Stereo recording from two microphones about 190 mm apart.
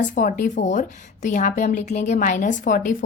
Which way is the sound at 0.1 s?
45° left (ahead or behind).